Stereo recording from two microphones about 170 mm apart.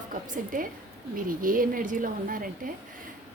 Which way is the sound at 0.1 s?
55° right (ahead or behind).